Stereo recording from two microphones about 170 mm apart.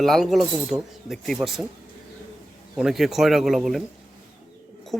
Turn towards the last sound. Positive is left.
turn(degrees=0)  # may be behind; listen again after turning